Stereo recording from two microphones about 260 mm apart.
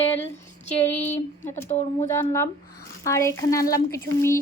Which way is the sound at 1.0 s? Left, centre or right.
Centre.